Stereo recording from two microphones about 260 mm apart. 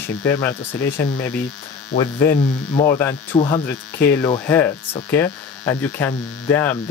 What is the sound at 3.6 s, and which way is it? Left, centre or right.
Speech, centre.